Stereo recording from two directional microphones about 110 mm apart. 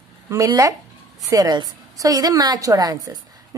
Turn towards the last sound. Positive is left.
turn(degrees=-35)  # may be behind; listen again after turning